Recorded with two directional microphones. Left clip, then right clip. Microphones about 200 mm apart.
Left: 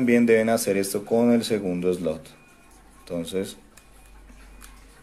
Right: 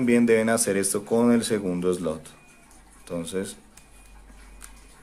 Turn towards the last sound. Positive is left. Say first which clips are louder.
# left 2 dB
turn(degrees=0)  # may be behind; listen again after turning